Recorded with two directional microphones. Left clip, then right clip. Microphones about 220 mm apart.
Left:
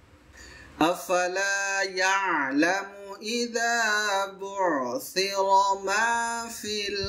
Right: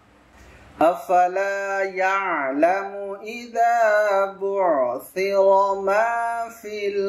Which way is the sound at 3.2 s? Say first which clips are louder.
Right 6 dB; 65° left (ahead or behind).